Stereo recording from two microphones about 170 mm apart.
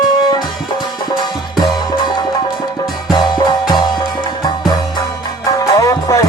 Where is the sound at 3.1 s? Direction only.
25° left (ahead or behind).